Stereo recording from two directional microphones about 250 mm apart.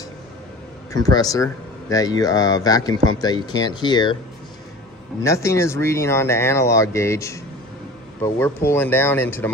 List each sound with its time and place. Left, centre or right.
0.9 s speech: centre
5.2 s speech: centre